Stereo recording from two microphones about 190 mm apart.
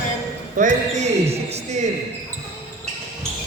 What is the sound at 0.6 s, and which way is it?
Basketball bounce, 35° right (ahead or behind).